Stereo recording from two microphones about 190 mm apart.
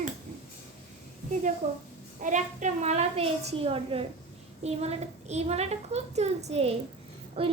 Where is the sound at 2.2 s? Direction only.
40° right (ahead or behind).